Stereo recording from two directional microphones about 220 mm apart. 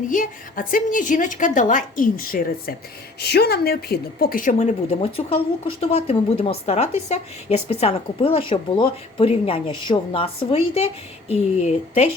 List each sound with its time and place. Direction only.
0.1 s a woman's voice: 40° left (ahead or behind)
4.9 s a woman's voice: 25° left (ahead or behind)